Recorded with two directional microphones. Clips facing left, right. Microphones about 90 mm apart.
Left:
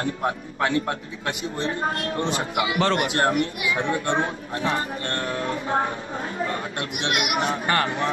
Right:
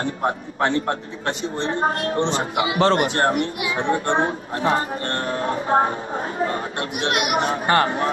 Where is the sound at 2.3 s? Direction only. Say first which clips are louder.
Right 3 dB; 30° right (ahead or behind).